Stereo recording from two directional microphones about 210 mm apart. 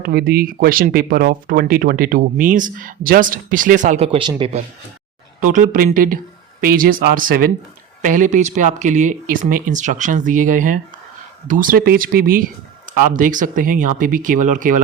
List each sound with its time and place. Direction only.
0.0 s speech: 50° right (ahead or behind); by 4.6 s 25° right (ahead or behind)
5.5 s speech: 40° right (ahead or behind)